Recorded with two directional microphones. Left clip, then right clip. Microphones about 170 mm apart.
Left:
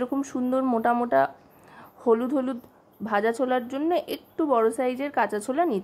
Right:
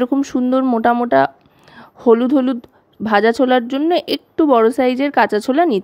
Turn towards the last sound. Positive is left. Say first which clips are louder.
# right 10 dB
turn(degrees=-45)  # may be behind; listen again after turning